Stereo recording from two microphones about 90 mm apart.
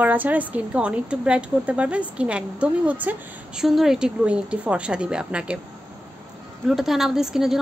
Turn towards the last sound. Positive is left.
turn(degrees=-5)  # may be behind; listen again after turning